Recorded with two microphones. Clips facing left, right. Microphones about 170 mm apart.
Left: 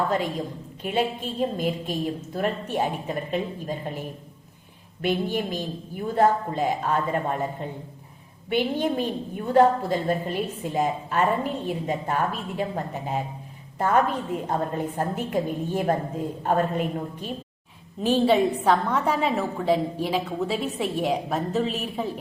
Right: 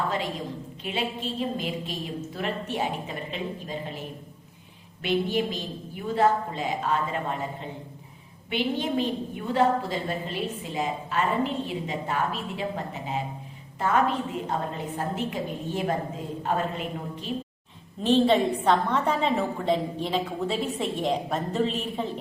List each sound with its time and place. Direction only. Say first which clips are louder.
0.8 s a woman's voice: left 6 dB; 50° left (ahead or behind)
5.0 s a woman's voice: even; 50° left (ahead or behind)
8.4 s a woman's voice: left 3 dB; 50° left (ahead or behind)
18.0 s a woman's voice: left 1 dB; 10° left (ahead or behind)